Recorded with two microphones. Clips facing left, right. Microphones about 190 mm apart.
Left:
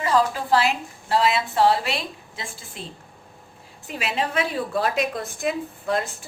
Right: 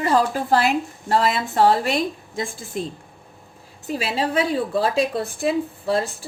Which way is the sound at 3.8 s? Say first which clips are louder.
Right 3 dB; 35° right (ahead or behind).